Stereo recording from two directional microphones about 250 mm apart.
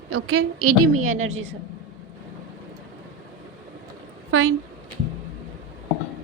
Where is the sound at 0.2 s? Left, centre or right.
Right.